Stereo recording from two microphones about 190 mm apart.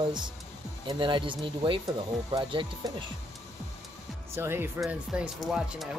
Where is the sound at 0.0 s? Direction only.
25° right (ahead or behind).